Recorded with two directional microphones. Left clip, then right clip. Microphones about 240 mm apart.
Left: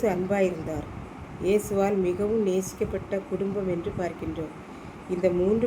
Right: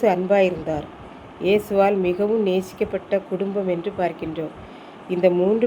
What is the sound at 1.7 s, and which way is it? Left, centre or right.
A woman's voice, centre.